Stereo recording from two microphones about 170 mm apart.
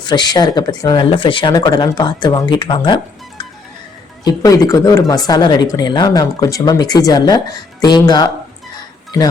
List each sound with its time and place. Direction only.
0.0 s speech: 25° left (ahead or behind)